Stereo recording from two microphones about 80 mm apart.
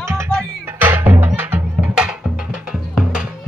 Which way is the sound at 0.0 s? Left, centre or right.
Right.